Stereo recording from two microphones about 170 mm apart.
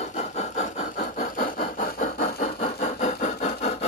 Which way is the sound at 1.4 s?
50° left (ahead or behind).